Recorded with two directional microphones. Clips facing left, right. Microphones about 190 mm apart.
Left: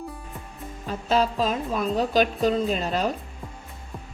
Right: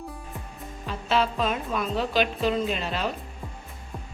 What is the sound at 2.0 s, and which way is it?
A woman's voice, 45° left (ahead or behind).